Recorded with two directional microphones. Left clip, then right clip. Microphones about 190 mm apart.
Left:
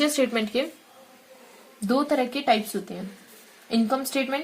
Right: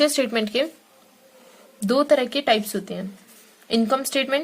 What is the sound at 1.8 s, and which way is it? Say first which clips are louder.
Speech: right 5 dB; 50° right (ahead or behind).